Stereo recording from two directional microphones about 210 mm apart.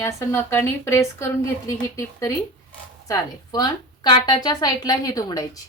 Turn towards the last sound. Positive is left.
turn(degrees=15)  # may be behind; listen again after turning